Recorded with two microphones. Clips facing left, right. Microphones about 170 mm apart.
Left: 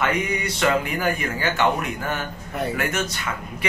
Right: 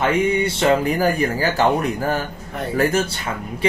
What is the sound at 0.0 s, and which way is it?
Speech, 30° right (ahead or behind).